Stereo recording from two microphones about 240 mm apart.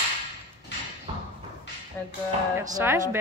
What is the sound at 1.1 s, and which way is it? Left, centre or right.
Thump, right.